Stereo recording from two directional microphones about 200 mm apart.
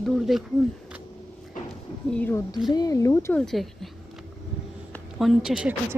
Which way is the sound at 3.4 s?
Centre (ahead or behind).